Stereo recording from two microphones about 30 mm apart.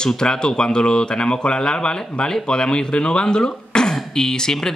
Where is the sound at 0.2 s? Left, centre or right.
Left.